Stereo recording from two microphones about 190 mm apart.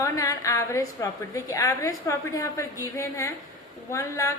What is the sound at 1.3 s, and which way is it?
A woman's voice, 15° left (ahead or behind).